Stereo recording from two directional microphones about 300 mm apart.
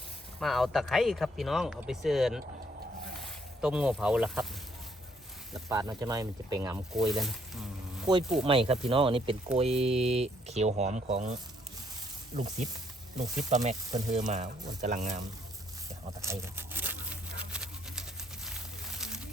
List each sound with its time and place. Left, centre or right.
0.3 s speech: centre
5.6 s speech: centre
6.9 s speech: centre
8.4 s speech: centre
13.6 s speech: right
16.2 s a sound: centre